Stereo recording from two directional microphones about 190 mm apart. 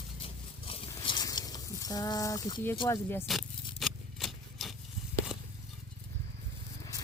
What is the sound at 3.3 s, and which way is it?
Speech, centre (ahead or behind).